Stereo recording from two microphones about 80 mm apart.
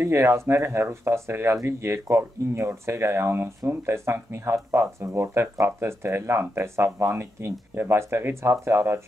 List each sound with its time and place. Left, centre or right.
0.0 s speech: right